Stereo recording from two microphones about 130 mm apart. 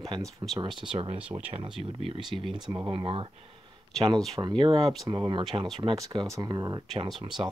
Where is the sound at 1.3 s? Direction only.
25° right (ahead or behind).